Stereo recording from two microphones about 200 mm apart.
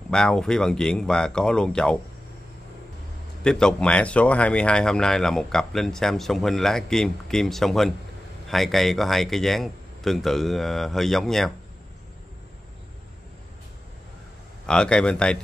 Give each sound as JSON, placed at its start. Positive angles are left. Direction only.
{"t": 0.1, "sound": "speech", "side_deg": 5}
{"t": 3.4, "sound": "speech", "side_deg": 5}
{"t": 14.7, "sound": "speech", "side_deg": 5}